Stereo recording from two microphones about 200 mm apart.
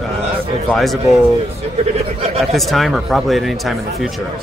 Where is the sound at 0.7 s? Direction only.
Centre (ahead or behind).